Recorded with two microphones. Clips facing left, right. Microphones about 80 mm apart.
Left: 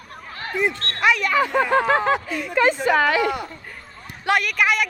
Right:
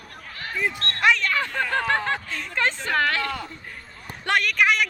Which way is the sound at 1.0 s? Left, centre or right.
Centre.